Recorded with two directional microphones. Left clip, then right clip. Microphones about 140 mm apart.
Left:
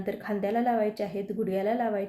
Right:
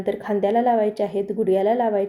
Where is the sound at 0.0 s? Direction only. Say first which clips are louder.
Right 9 dB; 15° right (ahead or behind).